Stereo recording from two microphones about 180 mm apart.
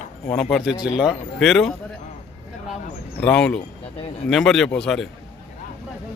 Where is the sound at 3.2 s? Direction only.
5° left (ahead or behind).